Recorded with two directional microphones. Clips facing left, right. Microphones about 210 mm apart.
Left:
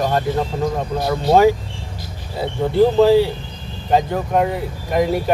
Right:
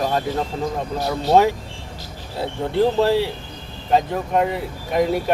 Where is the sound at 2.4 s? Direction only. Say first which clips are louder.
Left 4 dB; centre (ahead or behind).